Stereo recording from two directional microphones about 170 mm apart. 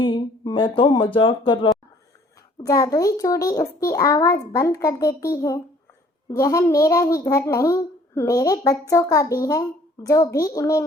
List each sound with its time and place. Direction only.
0.0 s a child's voice: 30° left (ahead or behind)
2.6 s a child's voice: 20° left (ahead or behind)